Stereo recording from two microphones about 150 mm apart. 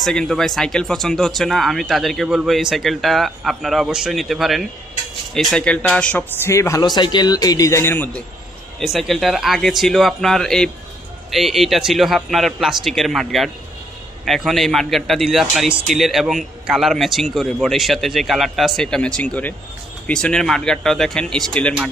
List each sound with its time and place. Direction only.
0.0 s a man's voice: centre (ahead or behind)
8.8 s a man's voice: centre (ahead or behind)